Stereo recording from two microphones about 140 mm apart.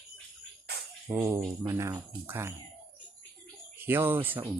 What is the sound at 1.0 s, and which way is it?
Speech, 20° right (ahead or behind).